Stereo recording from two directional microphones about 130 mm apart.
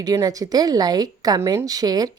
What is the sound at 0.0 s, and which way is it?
A woman's voice, 25° right (ahead or behind).